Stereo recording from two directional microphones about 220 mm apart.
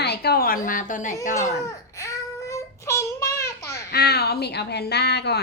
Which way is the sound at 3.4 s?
15° left (ahead or behind).